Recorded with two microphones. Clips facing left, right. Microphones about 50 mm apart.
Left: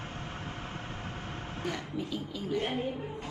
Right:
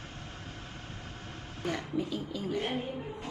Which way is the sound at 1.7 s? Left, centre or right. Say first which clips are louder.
Right 5 dB; centre.